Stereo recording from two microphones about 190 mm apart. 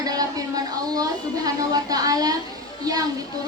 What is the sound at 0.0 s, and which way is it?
Speech, 20° right (ahead or behind).